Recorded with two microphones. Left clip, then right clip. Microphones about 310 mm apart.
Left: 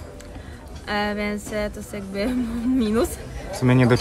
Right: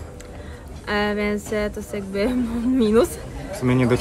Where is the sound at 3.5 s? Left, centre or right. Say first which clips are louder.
Left 1 dB; left.